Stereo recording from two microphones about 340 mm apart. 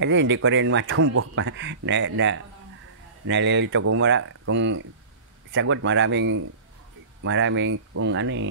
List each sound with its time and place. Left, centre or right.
0.0 s speech: right